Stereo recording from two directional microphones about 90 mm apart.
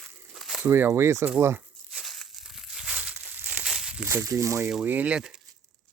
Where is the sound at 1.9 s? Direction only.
Centre (ahead or behind); by 3.6 s 20° right (ahead or behind).